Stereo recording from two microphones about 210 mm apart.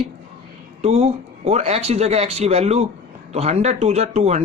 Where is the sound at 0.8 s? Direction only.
30° right (ahead or behind).